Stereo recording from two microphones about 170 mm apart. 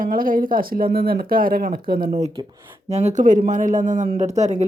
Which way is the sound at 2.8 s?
40° right (ahead or behind).